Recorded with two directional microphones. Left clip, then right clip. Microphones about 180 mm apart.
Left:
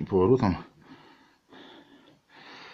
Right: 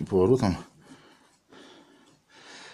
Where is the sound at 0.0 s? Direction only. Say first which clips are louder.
Even; 5° right (ahead or behind).